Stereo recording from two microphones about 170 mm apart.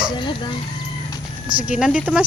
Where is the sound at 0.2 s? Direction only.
30° left (ahead or behind).